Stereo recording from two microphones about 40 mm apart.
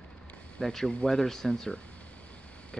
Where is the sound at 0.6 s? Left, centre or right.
Centre.